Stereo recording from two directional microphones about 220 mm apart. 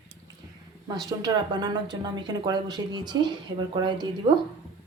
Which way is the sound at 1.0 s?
20° right (ahead or behind).